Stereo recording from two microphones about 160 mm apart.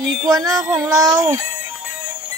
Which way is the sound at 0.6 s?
5° right (ahead or behind).